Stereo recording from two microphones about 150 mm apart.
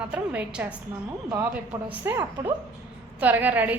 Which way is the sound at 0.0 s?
10° right (ahead or behind).